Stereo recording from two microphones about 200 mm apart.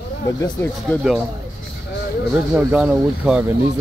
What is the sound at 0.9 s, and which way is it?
Speech, centre (ahead or behind).